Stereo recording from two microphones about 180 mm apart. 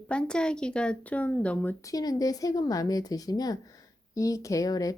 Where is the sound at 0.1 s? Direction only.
5° left (ahead or behind).